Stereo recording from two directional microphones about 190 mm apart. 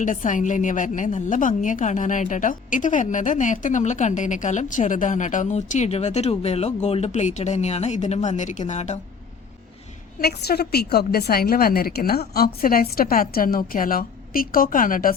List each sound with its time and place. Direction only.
0.0 s a woman's voice: 40° left (ahead or behind)
10.2 s a woman's voice: 55° left (ahead or behind)